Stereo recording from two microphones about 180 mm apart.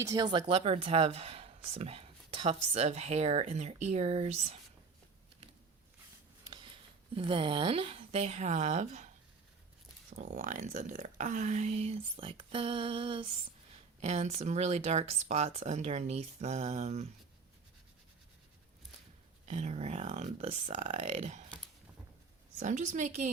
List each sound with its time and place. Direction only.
0.0 s speech: 20° right (ahead or behind); by 4.5 s 35° right (ahead or behind)
6.4 s speech: 25° right (ahead or behind)
10.2 s speech: 45° right (ahead or behind)
19.5 s speech: 35° right (ahead or behind)
22.5 s a woman's voice: 45° right (ahead or behind)